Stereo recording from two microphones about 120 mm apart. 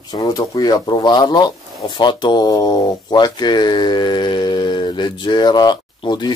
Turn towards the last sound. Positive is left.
turn(degrees=40)  # may be behind; listen again after turning